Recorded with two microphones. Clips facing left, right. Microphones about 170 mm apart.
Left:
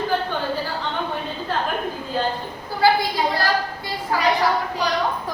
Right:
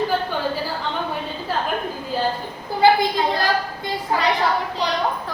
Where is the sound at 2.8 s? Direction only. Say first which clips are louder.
Right 2 dB; 20° right (ahead or behind).